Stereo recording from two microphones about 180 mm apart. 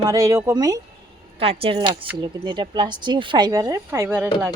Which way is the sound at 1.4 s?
30° right (ahead or behind).